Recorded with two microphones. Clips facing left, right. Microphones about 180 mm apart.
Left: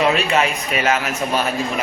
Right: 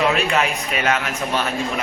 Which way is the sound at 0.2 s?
Centre (ahead or behind).